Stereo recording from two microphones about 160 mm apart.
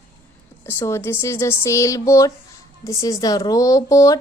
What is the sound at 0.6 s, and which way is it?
A woman's voice, 15° left (ahead or behind).